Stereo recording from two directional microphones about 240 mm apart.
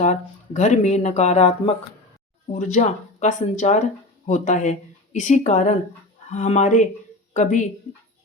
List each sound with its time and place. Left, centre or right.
0.0 s speech: left